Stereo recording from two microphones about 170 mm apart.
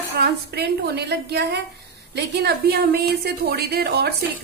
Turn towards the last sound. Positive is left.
turn(degrees=-70)  # may be behind; listen again after turning